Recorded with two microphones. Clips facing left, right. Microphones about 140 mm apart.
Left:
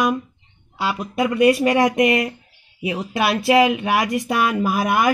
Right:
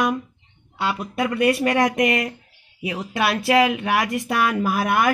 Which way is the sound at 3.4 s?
20° left (ahead or behind).